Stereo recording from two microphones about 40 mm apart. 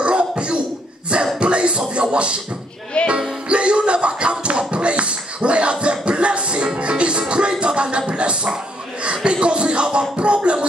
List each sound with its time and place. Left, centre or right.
0.0 s cough: right
1.4 s music: right
2.9 s music: left
3.4 s a sound: right